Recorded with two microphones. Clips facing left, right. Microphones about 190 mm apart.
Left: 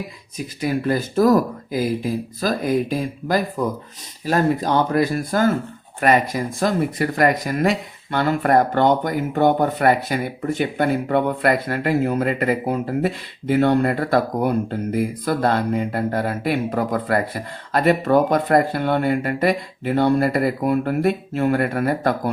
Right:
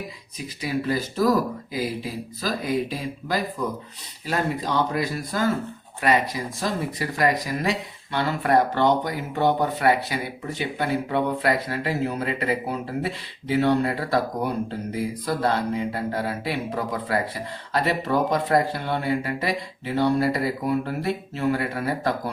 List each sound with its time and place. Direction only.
0.3 s speech: 50° left (ahead or behind)